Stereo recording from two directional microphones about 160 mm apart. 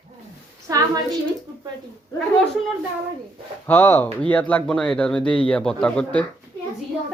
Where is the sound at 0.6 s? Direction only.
20° right (ahead or behind).